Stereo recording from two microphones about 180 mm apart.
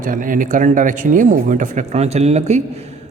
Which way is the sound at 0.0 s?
50° right (ahead or behind).